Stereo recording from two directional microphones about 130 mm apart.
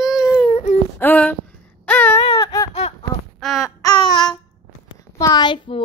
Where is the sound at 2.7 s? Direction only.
50° left (ahead or behind).